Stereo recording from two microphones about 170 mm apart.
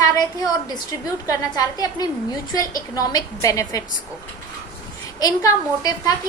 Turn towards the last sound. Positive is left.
turn(degrees=20)  # may be behind; listen again after turning